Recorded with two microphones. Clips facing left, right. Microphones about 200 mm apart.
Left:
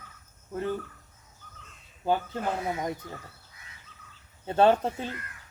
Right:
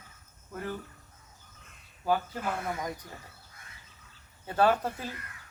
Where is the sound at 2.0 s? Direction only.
25° left (ahead or behind).